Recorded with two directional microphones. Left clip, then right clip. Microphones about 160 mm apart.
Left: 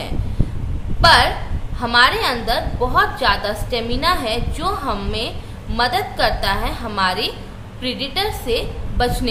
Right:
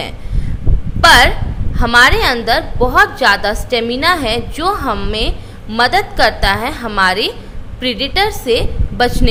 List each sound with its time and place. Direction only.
1.0 s a woman's voice: 45° right (ahead or behind)